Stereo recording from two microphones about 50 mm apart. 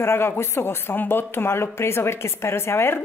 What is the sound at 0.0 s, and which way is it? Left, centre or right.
Speech, left.